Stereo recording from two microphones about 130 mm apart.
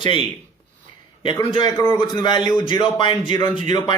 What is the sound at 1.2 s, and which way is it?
A man's voice, 40° left (ahead or behind).